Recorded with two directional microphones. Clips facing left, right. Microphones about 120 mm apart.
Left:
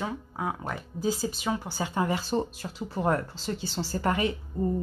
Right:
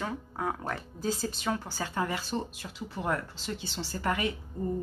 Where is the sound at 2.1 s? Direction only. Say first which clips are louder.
Left 5 dB; 35° left (ahead or behind).